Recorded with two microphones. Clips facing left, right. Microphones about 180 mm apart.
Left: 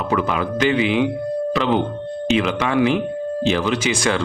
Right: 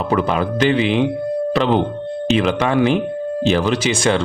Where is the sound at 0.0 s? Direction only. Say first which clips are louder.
Right 3 dB; 30° right (ahead or behind).